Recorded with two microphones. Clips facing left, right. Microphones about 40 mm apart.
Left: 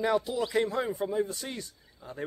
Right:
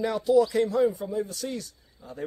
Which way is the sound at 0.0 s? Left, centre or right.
Centre.